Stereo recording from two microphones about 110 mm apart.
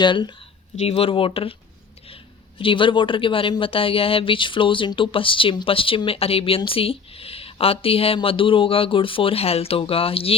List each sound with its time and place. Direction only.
0.0 s speech: 45° left (ahead or behind)
0.8 s speech: 65° left (ahead or behind)